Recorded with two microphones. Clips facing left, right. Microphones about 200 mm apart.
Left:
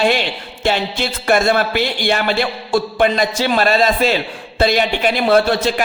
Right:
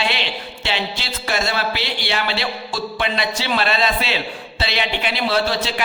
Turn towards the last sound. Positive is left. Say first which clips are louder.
# left 7 dB
turn(degrees=50)  # may be behind; listen again after turning